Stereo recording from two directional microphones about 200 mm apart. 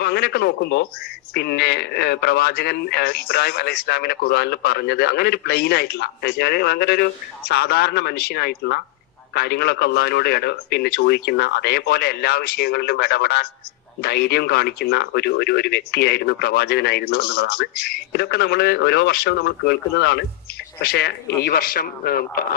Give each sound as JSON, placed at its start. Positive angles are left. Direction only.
{"t": 0.0, "sound": "speech", "side_deg": 55}